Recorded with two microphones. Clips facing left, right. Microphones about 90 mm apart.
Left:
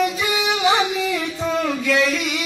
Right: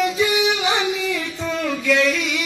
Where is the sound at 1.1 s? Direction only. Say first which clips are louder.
Left 2 dB; 10° left (ahead or behind).